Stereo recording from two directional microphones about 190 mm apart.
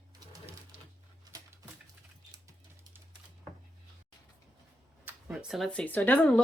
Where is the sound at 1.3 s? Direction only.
20° right (ahead or behind).